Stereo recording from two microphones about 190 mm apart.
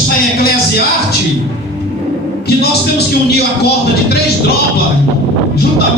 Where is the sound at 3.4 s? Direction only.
60° left (ahead or behind).